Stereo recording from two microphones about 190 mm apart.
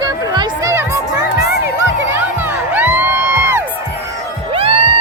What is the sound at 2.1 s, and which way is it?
Music, 10° right (ahead or behind).